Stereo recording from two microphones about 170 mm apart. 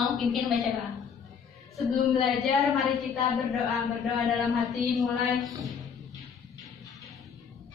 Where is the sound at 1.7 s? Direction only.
Centre (ahead or behind).